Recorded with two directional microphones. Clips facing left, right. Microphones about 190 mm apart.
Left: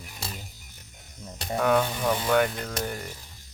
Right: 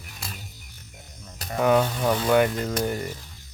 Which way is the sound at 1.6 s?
5° right (ahead or behind).